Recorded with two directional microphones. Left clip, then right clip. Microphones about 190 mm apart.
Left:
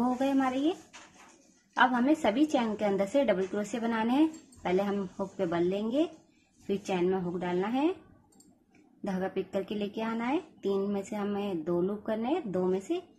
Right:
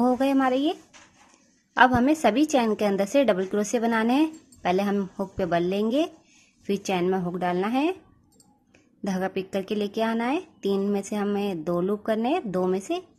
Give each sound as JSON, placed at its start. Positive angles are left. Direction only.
{"t": 0.0, "sound": "speech", "side_deg": -40}
{"t": 1.8, "sound": "a woman's voice", "side_deg": -40}
{"t": 9.0, "sound": "a woman's voice", "side_deg": -40}